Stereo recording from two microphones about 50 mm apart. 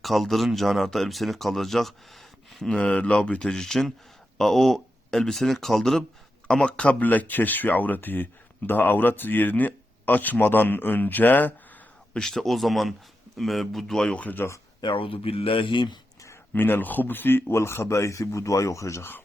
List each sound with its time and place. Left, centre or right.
0.0 s speech: centre
2.6 s speech: centre
6.5 s speech: centre; by 11.5 s left
12.1 s speech: centre
14.4 s speech: left
16.5 s speech: left
17.5 s speech: left